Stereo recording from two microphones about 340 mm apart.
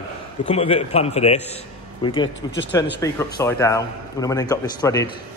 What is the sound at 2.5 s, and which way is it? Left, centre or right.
Speech, left.